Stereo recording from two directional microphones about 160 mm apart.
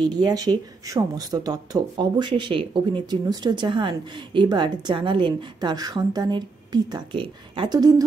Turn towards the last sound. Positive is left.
turn(degrees=-25)  # may be behind; listen again after turning